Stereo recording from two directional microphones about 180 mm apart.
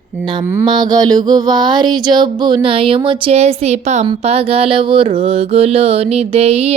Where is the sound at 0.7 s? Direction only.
20° right (ahead or behind).